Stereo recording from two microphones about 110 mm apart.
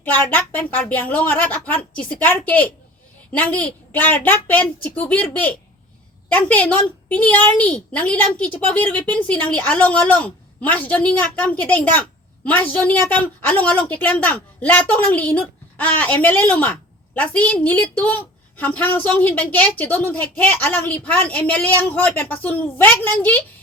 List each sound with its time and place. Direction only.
0.0 s a woman's voice: 15° left (ahead or behind)